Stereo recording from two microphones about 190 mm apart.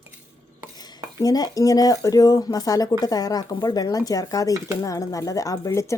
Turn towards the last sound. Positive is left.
turn(degrees=15)  # may be behind; listen again after turning